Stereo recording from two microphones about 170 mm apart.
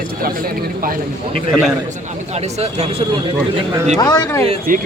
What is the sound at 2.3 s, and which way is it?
Speech, 40° right (ahead or behind).